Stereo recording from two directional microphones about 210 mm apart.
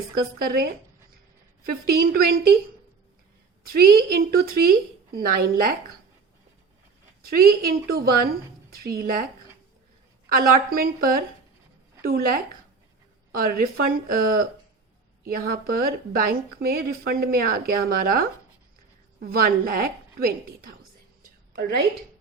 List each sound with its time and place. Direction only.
0.1 s speech: 45° right (ahead or behind)
3.7 s speech: 45° right (ahead or behind)
7.3 s speech: 45° right (ahead or behind)
10.2 s speech: 45° right (ahead or behind)
21.2 s whispering: 40° right (ahead or behind)